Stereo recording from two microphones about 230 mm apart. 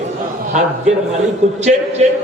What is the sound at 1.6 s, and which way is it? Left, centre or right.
Speech, right.